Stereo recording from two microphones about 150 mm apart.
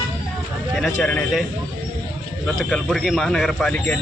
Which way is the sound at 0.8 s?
10° left (ahead or behind).